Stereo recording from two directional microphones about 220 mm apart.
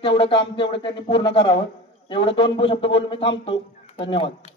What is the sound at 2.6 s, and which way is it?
Speech, 55° left (ahead or behind).